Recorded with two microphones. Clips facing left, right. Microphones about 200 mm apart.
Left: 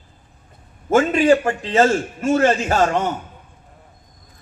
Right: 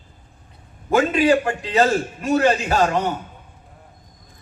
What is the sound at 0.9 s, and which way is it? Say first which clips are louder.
A man's voice: left 2 dB; 45° left (ahead or behind).